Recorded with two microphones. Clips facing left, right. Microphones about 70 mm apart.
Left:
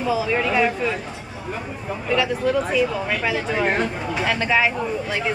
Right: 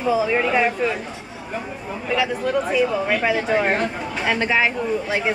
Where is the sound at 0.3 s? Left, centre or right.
Centre.